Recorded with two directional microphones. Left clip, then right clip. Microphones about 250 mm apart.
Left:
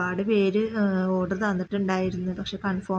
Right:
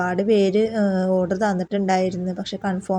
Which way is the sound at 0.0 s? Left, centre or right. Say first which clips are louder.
Right 5 dB; centre.